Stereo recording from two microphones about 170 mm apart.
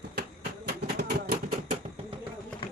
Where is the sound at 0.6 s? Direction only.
65° right (ahead or behind).